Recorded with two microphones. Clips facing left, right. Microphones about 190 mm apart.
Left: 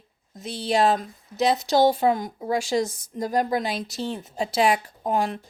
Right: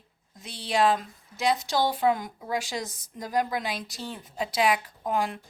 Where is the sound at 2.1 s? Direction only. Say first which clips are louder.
Left 4 dB; 40° left (ahead or behind).